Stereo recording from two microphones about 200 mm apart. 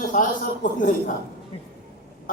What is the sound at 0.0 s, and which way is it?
Speech, 40° left (ahead or behind).